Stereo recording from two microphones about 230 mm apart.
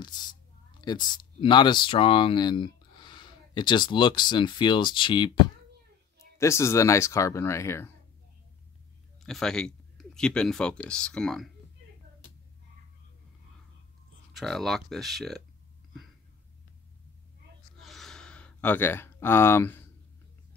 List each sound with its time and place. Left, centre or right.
0.0 s speech: centre
9.2 s speech: centre
14.3 s speech: centre
17.7 s gasp: centre